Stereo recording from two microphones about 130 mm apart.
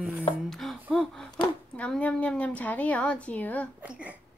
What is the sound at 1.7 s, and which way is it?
A woman's voice, 10° left (ahead or behind).